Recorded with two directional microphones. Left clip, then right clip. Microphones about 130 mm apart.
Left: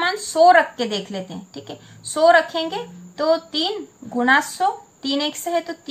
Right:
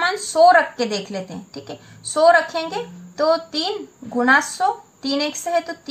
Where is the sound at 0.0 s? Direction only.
30° right (ahead or behind).